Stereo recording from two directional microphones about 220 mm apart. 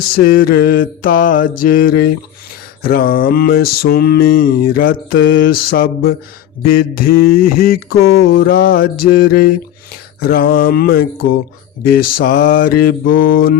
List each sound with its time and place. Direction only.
0.3 s mantra: 45° left (ahead or behind)